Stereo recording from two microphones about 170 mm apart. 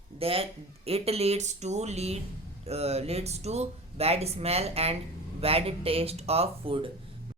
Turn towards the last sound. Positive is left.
turn(degrees=-35)  # may be behind; listen again after turning